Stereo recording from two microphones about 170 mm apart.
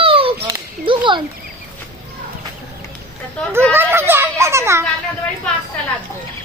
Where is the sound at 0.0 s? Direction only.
30° right (ahead or behind).